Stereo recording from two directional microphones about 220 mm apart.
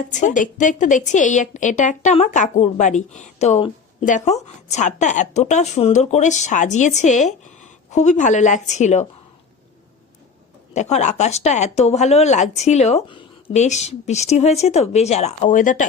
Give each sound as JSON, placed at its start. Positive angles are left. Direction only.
{"t": 0.0, "sound": "speech", "side_deg": 35}
{"t": 10.8, "sound": "speech", "side_deg": 30}